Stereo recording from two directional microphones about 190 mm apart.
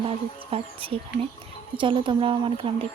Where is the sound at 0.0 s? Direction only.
30° right (ahead or behind).